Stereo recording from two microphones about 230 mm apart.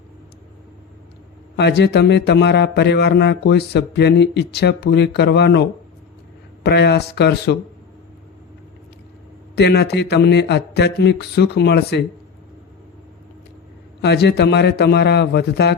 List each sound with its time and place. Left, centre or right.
1.5 s speech: left
9.6 s speech: left
14.0 s speech: left